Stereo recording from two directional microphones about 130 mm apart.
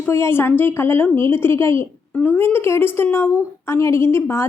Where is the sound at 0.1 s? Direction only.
20° left (ahead or behind).